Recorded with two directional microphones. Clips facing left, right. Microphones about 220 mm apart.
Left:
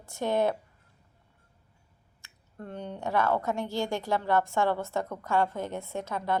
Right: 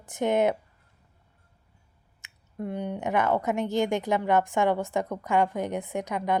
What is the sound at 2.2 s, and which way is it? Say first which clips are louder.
Speech: right 8 dB; 10° right (ahead or behind).